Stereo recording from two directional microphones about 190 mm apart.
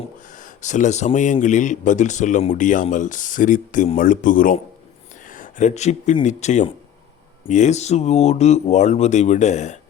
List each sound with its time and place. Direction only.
0.3 s speech: 40° left (ahead or behind)